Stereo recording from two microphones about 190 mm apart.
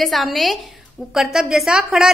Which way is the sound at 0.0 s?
Centre (ahead or behind).